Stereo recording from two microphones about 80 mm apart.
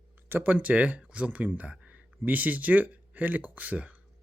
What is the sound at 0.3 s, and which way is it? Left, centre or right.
Speech, right.